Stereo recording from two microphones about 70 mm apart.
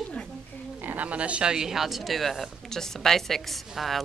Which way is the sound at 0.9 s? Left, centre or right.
Right.